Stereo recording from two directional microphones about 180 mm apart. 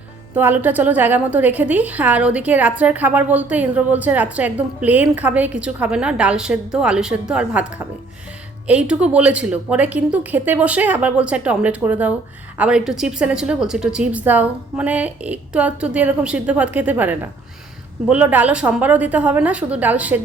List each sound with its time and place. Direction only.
0.3 s a woman's voice: 10° right (ahead or behind)